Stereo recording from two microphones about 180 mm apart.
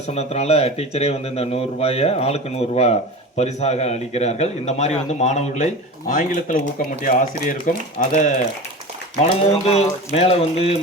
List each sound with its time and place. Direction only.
0.1 s a man's voice: 35° left (ahead or behind)